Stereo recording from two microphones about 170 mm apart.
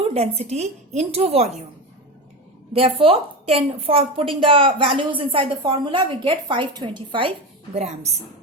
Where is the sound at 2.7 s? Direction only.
35° right (ahead or behind).